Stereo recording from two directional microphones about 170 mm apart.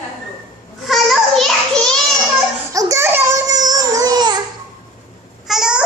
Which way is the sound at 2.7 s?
15° right (ahead or behind).